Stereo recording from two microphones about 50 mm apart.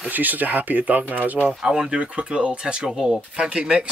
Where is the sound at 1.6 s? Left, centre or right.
Centre.